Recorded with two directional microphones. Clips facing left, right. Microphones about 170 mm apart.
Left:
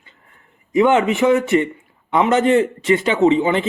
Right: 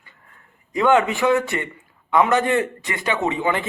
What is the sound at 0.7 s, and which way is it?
A man's voice, 20° left (ahead or behind).